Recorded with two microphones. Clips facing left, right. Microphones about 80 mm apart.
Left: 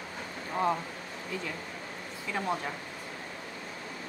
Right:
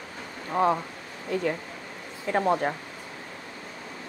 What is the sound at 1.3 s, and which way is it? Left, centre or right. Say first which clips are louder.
A woman's voice: right 11 dB; right.